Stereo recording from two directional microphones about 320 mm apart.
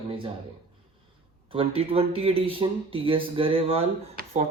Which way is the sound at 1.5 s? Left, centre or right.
Centre.